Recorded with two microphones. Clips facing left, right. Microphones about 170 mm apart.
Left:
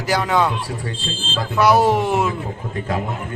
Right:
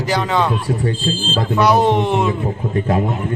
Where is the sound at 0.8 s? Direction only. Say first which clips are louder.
Right 8 dB; 35° right (ahead or behind).